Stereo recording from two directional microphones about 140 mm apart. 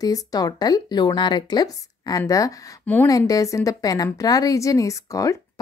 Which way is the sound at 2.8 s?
10° left (ahead or behind).